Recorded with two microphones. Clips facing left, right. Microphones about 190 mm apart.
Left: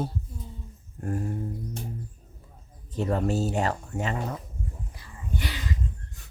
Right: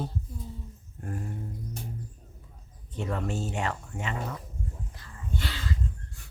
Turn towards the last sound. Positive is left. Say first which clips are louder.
# left 1 dB
turn(degrees=15)  # may be behind; listen again after turning